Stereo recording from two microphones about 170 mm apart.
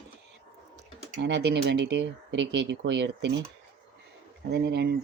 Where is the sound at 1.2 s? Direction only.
85° right.